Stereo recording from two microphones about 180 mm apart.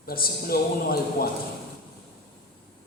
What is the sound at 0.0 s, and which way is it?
A man's voice, 55° left (ahead or behind).